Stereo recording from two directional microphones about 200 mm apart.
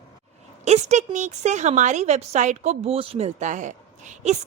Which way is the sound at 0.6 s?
35° right (ahead or behind).